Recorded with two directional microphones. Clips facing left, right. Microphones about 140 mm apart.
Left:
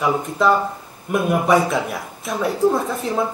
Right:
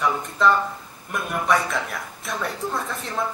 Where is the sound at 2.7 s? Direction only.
25° left (ahead or behind).